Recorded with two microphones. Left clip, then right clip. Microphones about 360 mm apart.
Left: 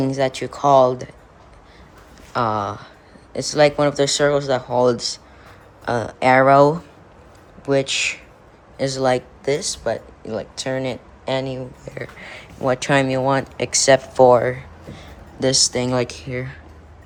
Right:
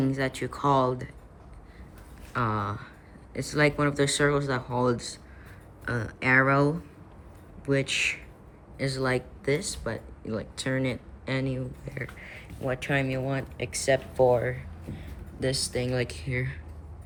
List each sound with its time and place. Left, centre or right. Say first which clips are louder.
0.0 s speech: left 8 dB; centre
2.3 s speech: left 8 dB; centre
12.2 s speech: left 15 dB; left
15.5 s speech: left 12 dB; centre